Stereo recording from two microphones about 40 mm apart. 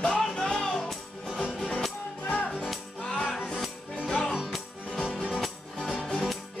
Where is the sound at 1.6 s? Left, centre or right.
Centre.